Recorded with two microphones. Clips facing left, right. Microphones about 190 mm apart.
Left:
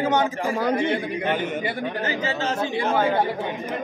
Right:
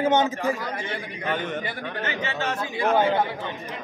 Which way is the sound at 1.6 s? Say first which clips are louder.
Left 5 dB; 20° left (ahead or behind).